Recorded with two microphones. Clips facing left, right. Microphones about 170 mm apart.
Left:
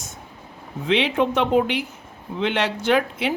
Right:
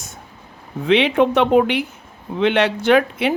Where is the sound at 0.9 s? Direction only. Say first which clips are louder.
Right 5 dB; 65° right (ahead or behind).